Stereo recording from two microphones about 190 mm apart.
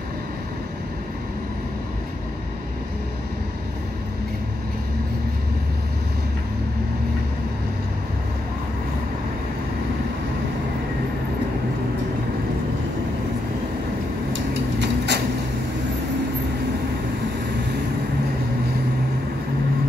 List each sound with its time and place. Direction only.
14.3 s vehicle: 65° right (ahead or behind)